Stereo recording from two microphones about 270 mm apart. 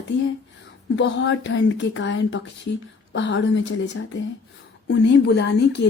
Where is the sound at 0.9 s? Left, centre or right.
Left.